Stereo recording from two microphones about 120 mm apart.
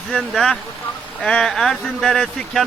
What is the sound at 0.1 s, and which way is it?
Speech, centre (ahead or behind).